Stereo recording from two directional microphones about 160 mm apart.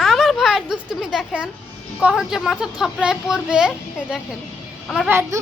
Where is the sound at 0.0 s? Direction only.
Centre (ahead or behind).